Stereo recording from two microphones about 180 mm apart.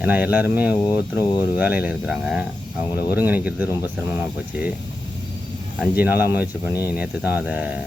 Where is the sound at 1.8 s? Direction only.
5° right (ahead or behind).